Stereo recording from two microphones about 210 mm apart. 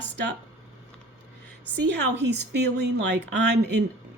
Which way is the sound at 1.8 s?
55° right (ahead or behind).